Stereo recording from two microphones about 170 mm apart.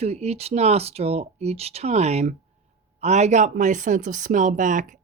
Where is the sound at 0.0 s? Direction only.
40° right (ahead or behind).